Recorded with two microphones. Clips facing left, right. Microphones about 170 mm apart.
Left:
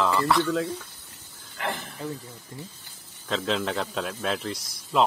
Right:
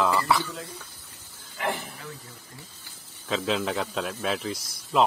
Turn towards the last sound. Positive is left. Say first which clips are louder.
# right 1 dB
turn(degrees=0)  # may be behind; listen again after turning